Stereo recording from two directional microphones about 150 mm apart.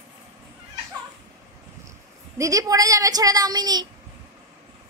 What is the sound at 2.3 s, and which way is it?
Speech, 20° right (ahead or behind).